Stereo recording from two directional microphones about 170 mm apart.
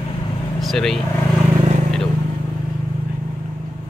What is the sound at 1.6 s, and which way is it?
Vehicle, 45° right (ahead or behind).